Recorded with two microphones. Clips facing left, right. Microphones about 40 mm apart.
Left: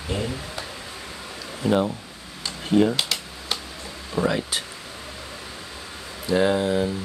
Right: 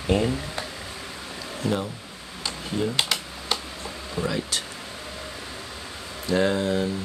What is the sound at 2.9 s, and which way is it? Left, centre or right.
Computer keyboard, centre.